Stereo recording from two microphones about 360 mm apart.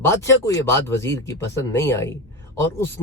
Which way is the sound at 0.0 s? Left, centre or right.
Centre.